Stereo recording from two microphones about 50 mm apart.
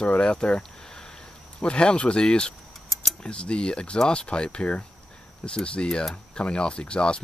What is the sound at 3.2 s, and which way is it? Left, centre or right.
Speech, left.